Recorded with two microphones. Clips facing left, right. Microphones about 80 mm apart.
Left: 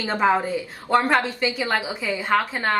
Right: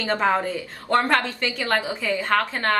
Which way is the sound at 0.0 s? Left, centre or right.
Centre.